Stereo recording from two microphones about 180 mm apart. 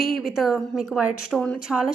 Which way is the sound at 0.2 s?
Centre (ahead or behind).